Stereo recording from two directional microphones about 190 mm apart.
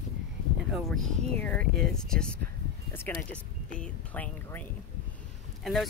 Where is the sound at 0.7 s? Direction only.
Centre (ahead or behind).